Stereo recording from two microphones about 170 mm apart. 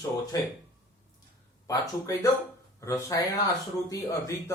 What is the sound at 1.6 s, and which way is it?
Speech, 20° left (ahead or behind).